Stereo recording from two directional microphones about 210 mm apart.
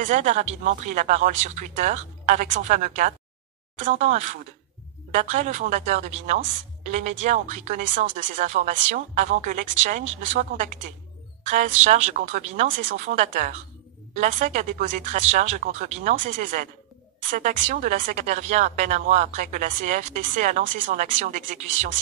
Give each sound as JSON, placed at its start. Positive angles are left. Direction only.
{"t": 0.0, "sound": "a woman's voice", "side_deg": -35}